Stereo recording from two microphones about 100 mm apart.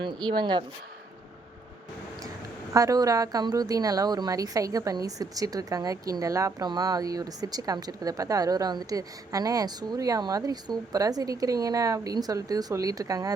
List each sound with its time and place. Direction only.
0.0 s speech: 50° right (ahead or behind)
2.7 s speech: 35° right (ahead or behind)